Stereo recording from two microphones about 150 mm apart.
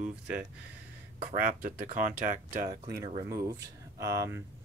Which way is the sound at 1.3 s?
70° right (ahead or behind).